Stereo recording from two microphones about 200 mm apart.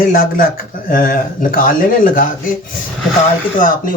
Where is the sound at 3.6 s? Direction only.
45° left (ahead or behind).